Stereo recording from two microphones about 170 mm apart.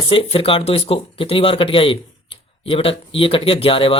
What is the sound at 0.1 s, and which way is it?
Speech, 35° left (ahead or behind).